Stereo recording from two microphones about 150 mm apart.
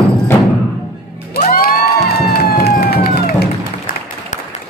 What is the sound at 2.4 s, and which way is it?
Music, 90° left.